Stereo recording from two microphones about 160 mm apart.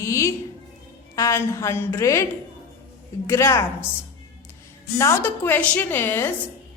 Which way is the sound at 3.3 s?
15° left (ahead or behind).